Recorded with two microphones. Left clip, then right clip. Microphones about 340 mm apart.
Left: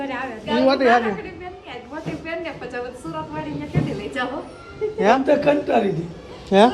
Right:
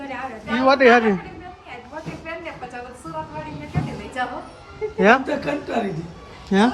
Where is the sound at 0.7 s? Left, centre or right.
Right.